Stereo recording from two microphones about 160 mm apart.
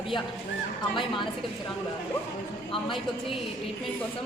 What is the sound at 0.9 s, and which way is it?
Speech, 30° left (ahead or behind).